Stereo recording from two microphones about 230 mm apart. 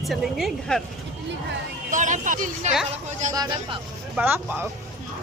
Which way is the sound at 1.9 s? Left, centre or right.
Right.